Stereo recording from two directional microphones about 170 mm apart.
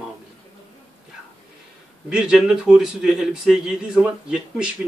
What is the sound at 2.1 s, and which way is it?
A man's voice, 5° right (ahead or behind).